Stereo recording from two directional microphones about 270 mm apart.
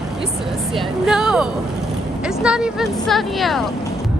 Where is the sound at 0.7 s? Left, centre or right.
Centre.